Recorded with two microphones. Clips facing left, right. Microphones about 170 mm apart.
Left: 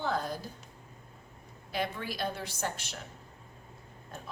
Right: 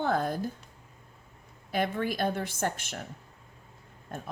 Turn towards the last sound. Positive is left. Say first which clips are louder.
# right 6 dB
turn(degrees=-55)  # may be behind; listen again after turning